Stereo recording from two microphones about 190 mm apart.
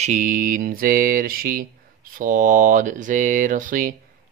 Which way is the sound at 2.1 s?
45° right (ahead or behind).